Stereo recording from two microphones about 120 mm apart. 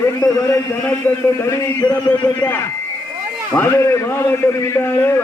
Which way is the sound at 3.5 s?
10° left (ahead or behind).